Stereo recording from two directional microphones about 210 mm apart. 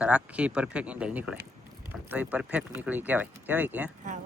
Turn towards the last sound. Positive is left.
turn(degrees=-10)  # may be behind; listen again after turning